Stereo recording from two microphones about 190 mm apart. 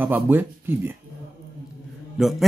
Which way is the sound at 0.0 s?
10° right (ahead or behind).